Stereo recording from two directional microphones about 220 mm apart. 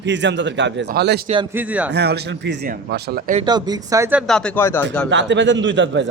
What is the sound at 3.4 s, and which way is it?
Speech, 15° right (ahead or behind).